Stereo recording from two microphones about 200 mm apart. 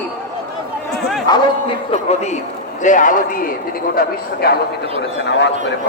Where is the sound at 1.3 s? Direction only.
20° left (ahead or behind).